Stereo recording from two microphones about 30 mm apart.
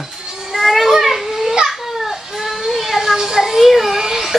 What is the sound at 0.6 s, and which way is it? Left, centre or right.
Children playing, centre.